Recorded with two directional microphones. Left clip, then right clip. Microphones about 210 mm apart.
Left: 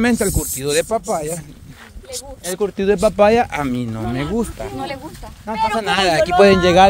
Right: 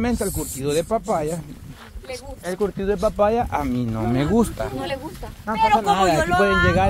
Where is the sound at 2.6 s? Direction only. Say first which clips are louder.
Left 6 dB; 40° left (ahead or behind).